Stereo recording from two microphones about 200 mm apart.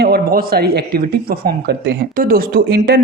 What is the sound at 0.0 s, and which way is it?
Speech, 50° right (ahead or behind).